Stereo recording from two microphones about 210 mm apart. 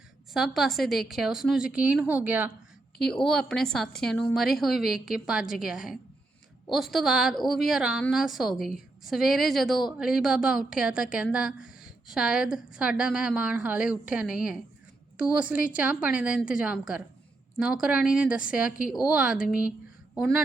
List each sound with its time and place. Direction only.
0.3 s a woman's voice: centre (ahead or behind)
3.1 s a woman's voice: 5° left (ahead or behind)